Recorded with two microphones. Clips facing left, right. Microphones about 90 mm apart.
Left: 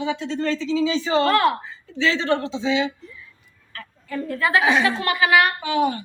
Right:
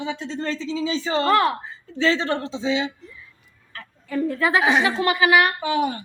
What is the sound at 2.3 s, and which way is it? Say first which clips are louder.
Speech: left 2 dB; 35° right (ahead or behind).